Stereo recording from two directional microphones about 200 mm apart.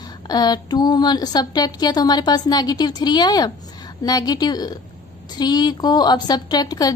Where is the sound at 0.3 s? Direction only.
20° left (ahead or behind).